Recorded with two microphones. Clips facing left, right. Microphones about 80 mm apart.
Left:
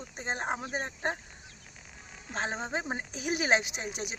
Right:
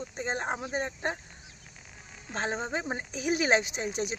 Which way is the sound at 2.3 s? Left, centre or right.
Centre.